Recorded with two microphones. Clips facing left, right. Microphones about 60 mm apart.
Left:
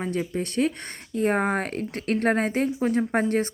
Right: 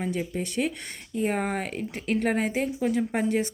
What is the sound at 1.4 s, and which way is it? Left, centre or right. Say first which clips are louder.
Speech: left 4 dB; left.